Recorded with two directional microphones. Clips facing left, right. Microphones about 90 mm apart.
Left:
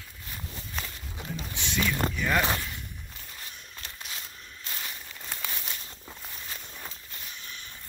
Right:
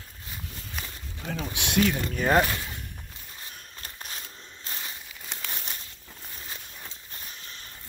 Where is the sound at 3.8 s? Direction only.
40° right (ahead or behind).